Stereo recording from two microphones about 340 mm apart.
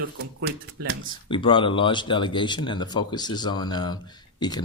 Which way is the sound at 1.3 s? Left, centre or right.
Centre.